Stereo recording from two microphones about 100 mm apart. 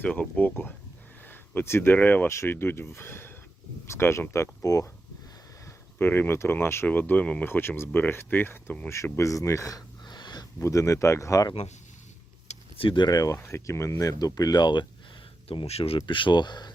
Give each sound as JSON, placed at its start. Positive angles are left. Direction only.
{"t": 0.0, "sound": "speech", "side_deg": 15}
{"t": 6.0, "sound": "speech", "side_deg": 20}
{"t": 9.0, "sound": "a sound", "side_deg": 30}
{"t": 10.6, "sound": "speech", "side_deg": 30}
{"t": 12.5, "sound": "a sound", "side_deg": 70}
{"t": 13.1, "sound": "speech", "side_deg": 40}
{"t": 13.3, "sound": "speech", "side_deg": 25}
{"t": 15.4, "sound": "speech", "side_deg": 85}
{"t": 16.0, "sound": "speech", "side_deg": 55}